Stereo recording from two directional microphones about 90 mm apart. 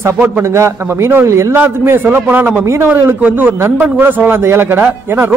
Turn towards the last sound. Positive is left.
turn(degrees=-20)  # may be behind; listen again after turning